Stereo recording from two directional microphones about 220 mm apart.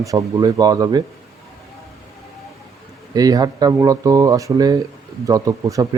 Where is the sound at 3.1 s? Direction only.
15° right (ahead or behind).